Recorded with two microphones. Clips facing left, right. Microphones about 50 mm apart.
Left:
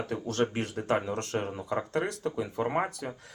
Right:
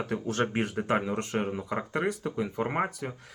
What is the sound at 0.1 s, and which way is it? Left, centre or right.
Speech, centre.